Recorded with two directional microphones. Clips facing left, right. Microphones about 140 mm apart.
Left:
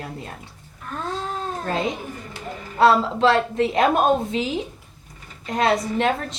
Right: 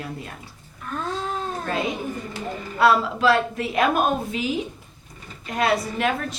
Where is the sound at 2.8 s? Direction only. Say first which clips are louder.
Left 2 dB; 25° left (ahead or behind).